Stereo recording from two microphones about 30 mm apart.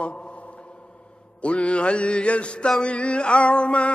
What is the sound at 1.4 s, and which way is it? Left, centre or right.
Mantra, left.